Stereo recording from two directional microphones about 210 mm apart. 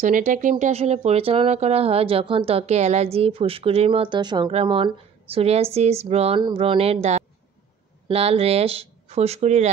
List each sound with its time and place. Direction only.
0.0 s speech: 35° right (ahead or behind)